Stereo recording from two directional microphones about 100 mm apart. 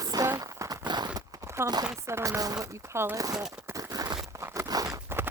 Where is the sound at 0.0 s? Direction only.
35° right (ahead or behind).